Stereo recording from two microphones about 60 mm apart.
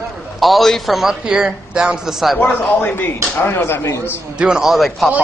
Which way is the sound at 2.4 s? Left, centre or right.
Left.